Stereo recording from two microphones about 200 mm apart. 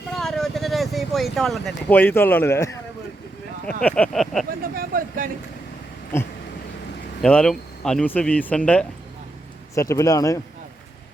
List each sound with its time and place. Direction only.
0.1 s vehicle: centre (ahead or behind)
3.8 s speech: 5° left (ahead or behind)
4.6 s speech: 45° right (ahead or behind)
7.2 s speech: 5° left (ahead or behind)